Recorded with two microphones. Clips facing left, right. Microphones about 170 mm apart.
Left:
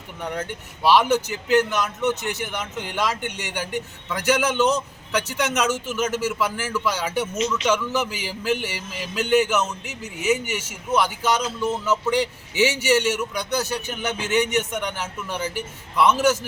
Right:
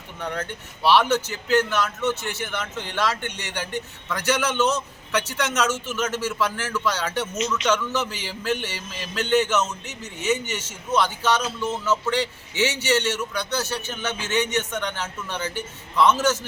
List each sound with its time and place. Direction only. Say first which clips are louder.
0.2 s music: left 1 dB; 10° left (ahead or behind)